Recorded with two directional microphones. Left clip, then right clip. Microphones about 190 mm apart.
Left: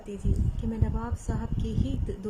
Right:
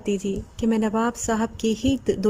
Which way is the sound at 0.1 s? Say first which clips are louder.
Right 10 dB; 50° right (ahead or behind).